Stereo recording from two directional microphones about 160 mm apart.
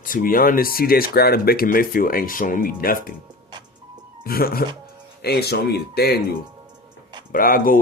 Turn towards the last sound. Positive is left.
turn(degrees=60)  # may be behind; listen again after turning